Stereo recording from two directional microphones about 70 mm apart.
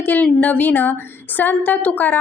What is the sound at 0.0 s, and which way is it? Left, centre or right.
A woman's voice, left.